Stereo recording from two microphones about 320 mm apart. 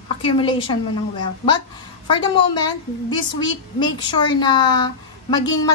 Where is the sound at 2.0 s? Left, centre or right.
Centre.